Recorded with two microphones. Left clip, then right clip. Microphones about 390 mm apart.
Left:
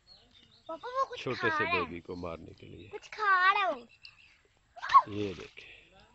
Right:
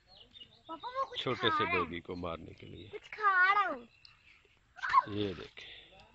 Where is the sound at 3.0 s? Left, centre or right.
Left.